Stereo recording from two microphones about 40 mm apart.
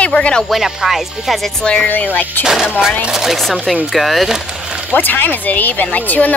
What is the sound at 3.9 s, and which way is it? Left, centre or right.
Speech, centre.